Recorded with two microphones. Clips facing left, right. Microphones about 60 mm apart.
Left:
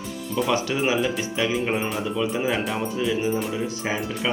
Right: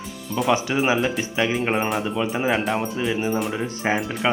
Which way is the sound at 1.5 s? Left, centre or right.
Right.